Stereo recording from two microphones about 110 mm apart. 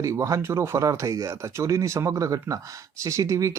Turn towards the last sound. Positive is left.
turn(degrees=-30)  # may be behind; listen again after turning